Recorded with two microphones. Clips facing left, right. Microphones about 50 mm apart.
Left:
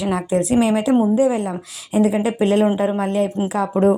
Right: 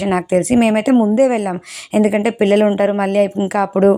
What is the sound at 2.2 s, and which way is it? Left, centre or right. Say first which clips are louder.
A woman's voice: right 4 dB; right.